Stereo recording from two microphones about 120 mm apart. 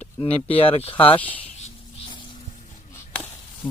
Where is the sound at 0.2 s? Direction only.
55° left (ahead or behind).